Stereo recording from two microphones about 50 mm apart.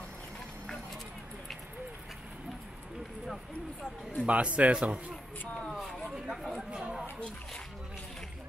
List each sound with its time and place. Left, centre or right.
4.2 s a man's voice: right
6.0 s chatter: centre